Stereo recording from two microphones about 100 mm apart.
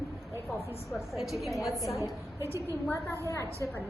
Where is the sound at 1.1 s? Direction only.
Centre (ahead or behind).